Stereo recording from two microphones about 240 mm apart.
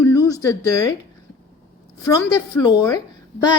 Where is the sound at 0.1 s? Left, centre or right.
Centre.